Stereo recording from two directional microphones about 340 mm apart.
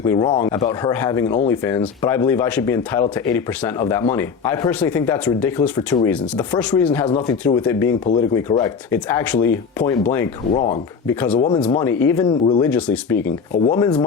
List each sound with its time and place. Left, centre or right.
0.0 s speech: centre
10.5 s speech: centre
11.0 s speech: centre